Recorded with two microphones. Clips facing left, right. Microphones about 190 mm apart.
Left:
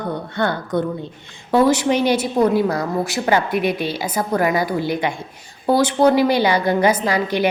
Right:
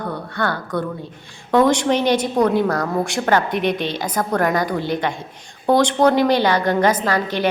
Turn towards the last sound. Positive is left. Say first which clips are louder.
# left 1 dB
turn(degrees=10)  # may be behind; listen again after turning